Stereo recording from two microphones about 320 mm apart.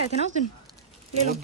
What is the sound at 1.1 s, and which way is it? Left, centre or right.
Speech, centre.